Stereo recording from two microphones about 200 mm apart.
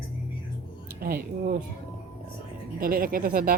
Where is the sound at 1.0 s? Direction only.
45° right (ahead or behind).